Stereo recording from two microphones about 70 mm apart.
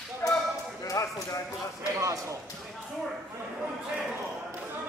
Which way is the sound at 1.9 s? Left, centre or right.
Right.